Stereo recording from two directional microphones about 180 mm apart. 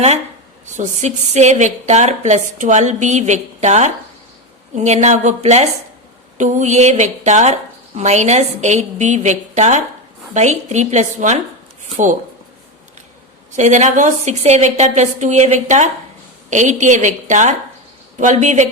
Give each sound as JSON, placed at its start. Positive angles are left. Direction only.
{"t": 0.8, "sound": "a woman's voice", "side_deg": -40}
{"t": 13.6, "sound": "a woman's voice", "side_deg": -40}